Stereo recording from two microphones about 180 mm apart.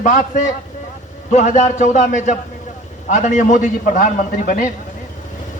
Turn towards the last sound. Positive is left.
turn(degrees=50)  # may be behind; listen again after turning